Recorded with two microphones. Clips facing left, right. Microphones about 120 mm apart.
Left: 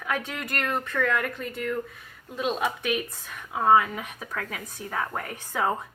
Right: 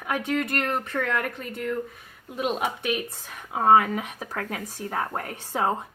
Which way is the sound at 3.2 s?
35° right (ahead or behind).